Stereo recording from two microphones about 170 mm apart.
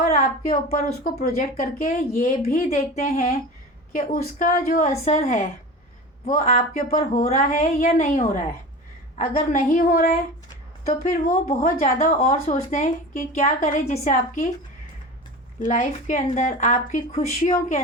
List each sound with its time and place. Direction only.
0.0 s a sound: 55° left (ahead or behind)
1.0 s speech: 45° left (ahead or behind)
15.6 s speech: 50° left (ahead or behind)